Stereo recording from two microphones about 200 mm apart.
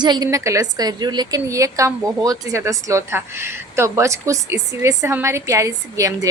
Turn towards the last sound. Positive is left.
turn(degrees=-15)  # may be behind; listen again after turning